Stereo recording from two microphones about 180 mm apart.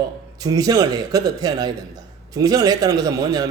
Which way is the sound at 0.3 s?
20° right (ahead or behind).